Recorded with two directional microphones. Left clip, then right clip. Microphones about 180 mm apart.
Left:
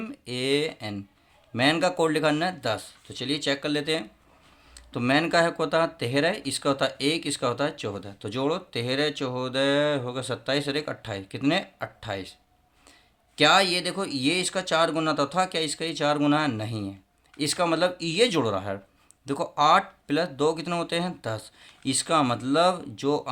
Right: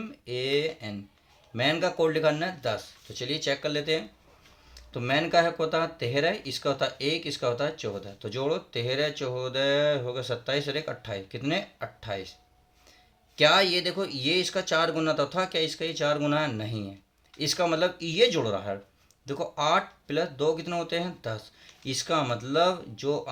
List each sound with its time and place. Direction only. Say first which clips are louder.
0.3 s speech: left 2 dB; 40° left (ahead or behind)
13.3 s speech: left 1 dB; 35° left (ahead or behind)